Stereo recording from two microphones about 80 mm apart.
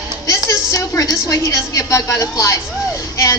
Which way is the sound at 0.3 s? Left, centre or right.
Left.